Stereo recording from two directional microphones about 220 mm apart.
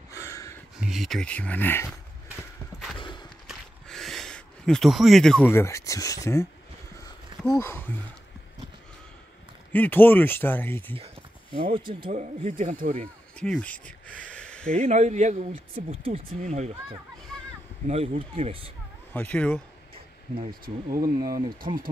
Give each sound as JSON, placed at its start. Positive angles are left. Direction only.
{"t": 0.1, "sound": "a sound", "side_deg": 15}
{"t": 0.7, "sound": "speech", "side_deg": 0}
{"t": 3.0, "sound": "walk", "side_deg": 20}
{"t": 3.4, "sound": "a sound", "side_deg": 0}
{"t": 7.4, "sound": "speech", "side_deg": 10}
{"t": 9.7, "sound": "speech", "side_deg": 10}
{"t": 11.5, "sound": "speech", "side_deg": -25}
{"t": 13.4, "sound": "a sound", "side_deg": 5}
{"t": 14.8, "sound": "speech", "side_deg": -30}
{"t": 17.3, "sound": "a sound", "side_deg": 0}
{"t": 17.8, "sound": "speech", "side_deg": -30}
{"t": 19.1, "sound": "speech", "side_deg": 5}
{"t": 20.6, "sound": "speech", "side_deg": -40}